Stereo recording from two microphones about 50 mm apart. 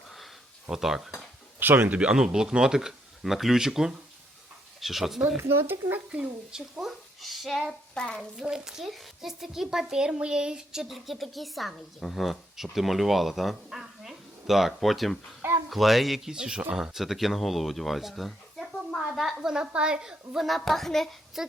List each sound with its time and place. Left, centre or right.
0.7 s speech: centre
1.5 s speech: right
1.8 s speech: right
2.0 s speech: centre
5.4 s speech: right
6.1 s speech: right
6.8 s speech: centre
7.9 s a sound: centre
8.4 s speech: centre
16.3 s speech: centre
19.4 s speech: centre
20.3 s speech: centre
21.4 s speech: centre